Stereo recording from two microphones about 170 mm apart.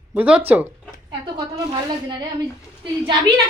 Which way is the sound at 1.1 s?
25° right (ahead or behind).